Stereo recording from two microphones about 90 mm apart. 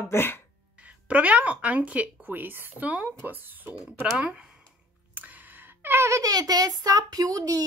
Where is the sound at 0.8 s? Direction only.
15° right (ahead or behind).